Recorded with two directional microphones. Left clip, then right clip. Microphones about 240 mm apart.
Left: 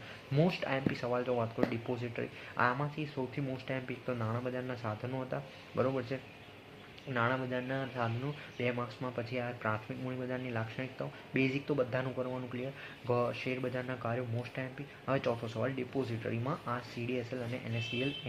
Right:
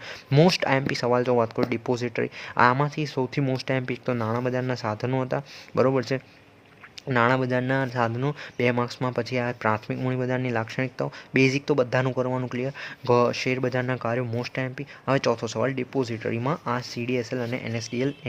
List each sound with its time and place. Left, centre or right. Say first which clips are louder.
0.3 s speech: right 12 dB; right